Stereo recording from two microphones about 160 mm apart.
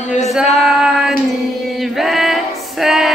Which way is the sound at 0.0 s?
45° left (ahead or behind).